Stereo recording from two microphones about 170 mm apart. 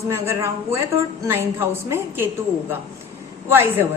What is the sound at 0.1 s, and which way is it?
A woman's voice, 15° right (ahead or behind).